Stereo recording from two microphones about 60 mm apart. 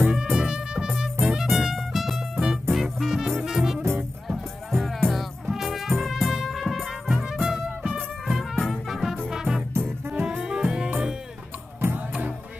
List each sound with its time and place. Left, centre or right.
0.1 s music: centre
8.4 s music: centre
9.8 s music: right
10.2 s music: centre
12.1 s music: right